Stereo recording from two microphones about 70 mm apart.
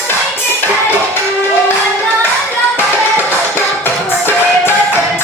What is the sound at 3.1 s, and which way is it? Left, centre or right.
Music, left.